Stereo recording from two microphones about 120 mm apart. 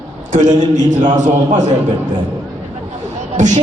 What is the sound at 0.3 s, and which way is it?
A man's voice, 90° right.